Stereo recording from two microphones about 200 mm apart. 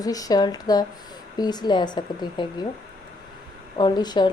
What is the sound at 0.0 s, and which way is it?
Speech, 20° left (ahead or behind).